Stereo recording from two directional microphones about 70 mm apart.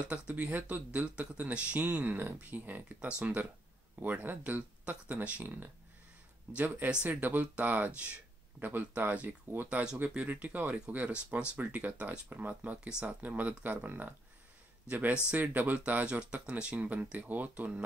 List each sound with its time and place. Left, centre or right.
0.0 s speech: centre
4.0 s speech: right